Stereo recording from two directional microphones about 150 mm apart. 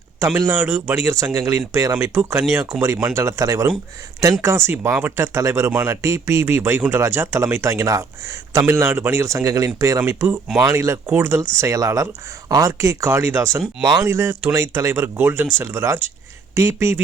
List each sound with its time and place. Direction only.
0.3 s speech: 20° right (ahead or behind)